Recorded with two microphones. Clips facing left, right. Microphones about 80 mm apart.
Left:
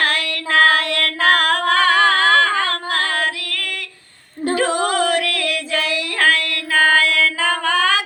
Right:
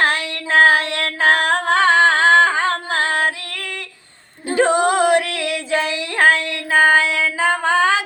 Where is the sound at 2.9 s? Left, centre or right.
Right.